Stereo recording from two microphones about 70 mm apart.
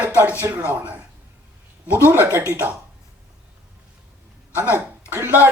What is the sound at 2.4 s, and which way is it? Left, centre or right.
Speech, right.